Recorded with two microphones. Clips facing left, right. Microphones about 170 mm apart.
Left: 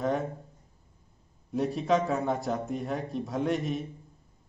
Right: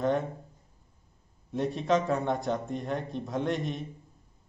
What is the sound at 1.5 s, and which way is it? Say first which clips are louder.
Speech: left 1 dB; centre (ahead or behind).